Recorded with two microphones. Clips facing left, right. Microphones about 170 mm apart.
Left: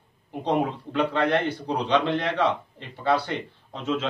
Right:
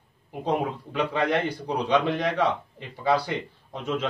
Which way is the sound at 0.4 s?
10° right (ahead or behind).